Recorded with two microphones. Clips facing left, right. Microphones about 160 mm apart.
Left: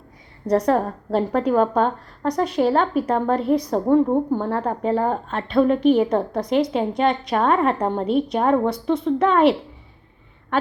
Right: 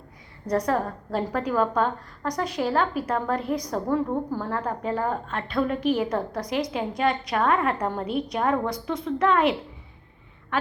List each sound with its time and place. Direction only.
0.5 s a woman's voice: 35° left (ahead or behind)
2.4 s a woman's voice: 60° left (ahead or behind)
2.6 s a woman's voice: 30° left (ahead or behind)